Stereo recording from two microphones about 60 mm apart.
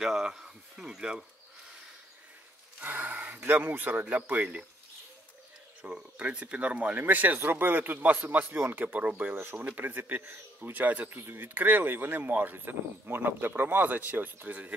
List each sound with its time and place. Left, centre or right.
0.0 s speech: centre
2.8 s speech: right
5.8 s speech: centre
11.1 s speech: right